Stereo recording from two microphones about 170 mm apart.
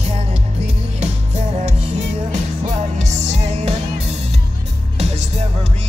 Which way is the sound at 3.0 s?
40° right (ahead or behind).